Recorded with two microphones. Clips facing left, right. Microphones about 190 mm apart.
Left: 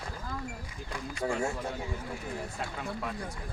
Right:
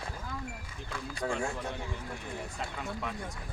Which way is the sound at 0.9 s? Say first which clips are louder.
Left 2 dB; 5° left (ahead or behind).